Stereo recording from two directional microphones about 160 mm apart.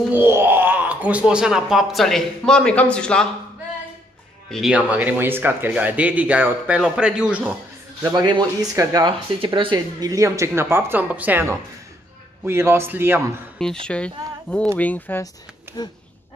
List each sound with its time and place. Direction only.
0.1 s speech: 15° right (ahead or behind); by 3.3 s 5° left (ahead or behind)
4.5 s speech: centre (ahead or behind)
8.0 s speech: 25° right (ahead or behind)
13.8 s speech: 5° left (ahead or behind)